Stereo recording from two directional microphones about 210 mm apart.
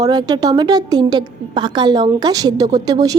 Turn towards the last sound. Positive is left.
turn(degrees=-20)  # may be behind; listen again after turning